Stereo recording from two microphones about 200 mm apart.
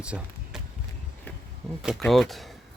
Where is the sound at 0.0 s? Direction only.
5° right (ahead or behind).